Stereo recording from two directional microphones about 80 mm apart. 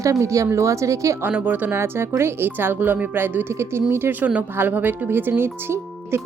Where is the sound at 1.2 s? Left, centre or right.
Right.